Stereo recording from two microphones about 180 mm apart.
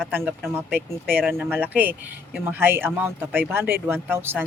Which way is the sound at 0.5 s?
10° right (ahead or behind).